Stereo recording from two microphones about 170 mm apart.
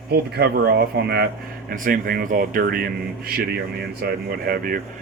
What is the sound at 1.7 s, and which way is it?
A man's voice, 55° right (ahead or behind).